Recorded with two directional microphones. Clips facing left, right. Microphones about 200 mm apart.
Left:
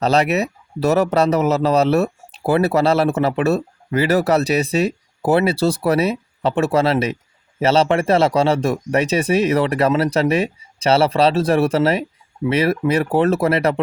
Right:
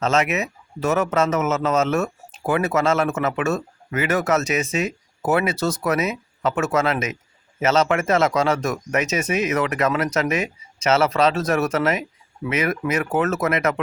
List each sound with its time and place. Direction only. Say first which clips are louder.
0.0 s a man's voice: left 4 dB; 35° left (ahead or behind)